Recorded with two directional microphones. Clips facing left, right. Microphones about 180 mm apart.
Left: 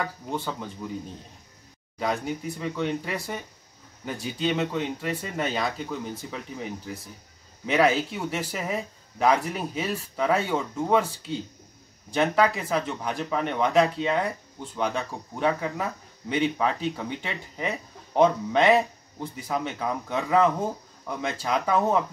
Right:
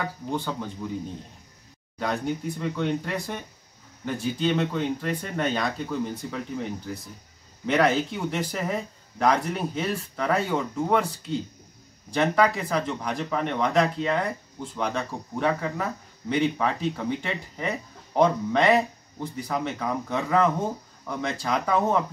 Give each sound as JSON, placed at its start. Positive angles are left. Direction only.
{"t": 0.3, "sound": "speech", "side_deg": 0}
{"t": 2.2, "sound": "speech", "side_deg": 0}